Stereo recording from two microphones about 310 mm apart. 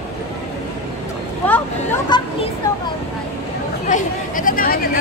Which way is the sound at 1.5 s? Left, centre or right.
Centre.